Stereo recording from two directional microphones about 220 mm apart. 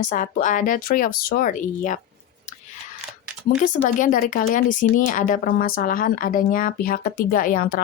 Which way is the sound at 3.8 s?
35° left (ahead or behind).